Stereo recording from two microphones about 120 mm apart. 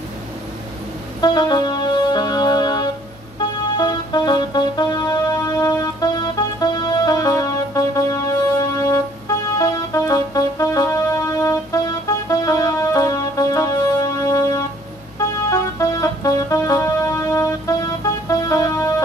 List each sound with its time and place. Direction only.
1.2 s music: 35° left (ahead or behind)